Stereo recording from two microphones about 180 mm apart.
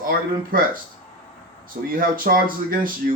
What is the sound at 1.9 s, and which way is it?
Speech, 50° right (ahead or behind).